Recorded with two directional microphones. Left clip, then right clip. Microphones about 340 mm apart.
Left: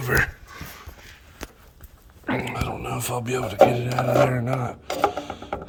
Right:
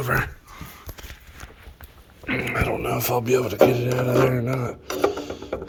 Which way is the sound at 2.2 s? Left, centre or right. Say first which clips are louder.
Right 1 dB; centre.